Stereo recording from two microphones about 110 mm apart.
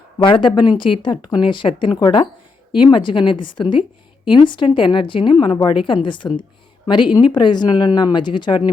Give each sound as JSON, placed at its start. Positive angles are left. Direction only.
{"t": 0.2, "sound": "a woman's voice", "side_deg": 50}